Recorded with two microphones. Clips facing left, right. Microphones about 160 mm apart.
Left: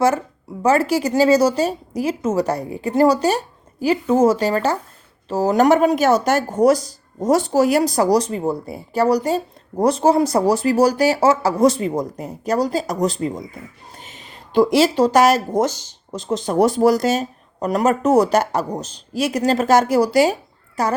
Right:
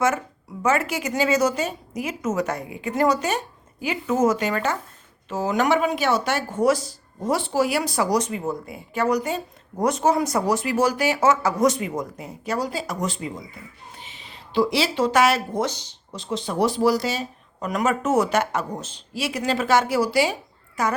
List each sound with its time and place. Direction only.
0.6 s speech: 35° left (ahead or behind)